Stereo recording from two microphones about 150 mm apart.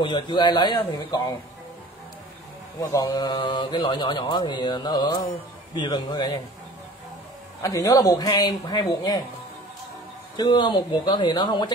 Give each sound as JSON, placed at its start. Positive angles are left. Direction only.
{"t": 0.0, "sound": "speech", "side_deg": 30}
{"t": 2.8, "sound": "speech", "side_deg": 25}
{"t": 7.6, "sound": "speech", "side_deg": 25}
{"t": 10.3, "sound": "speech", "side_deg": 30}